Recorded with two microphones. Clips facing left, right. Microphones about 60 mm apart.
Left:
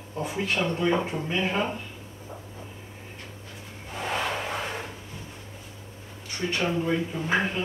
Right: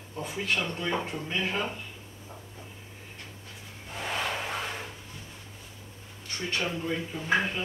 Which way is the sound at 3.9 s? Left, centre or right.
Centre.